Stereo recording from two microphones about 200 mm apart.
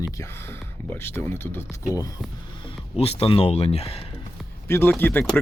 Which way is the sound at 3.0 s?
30° left (ahead or behind).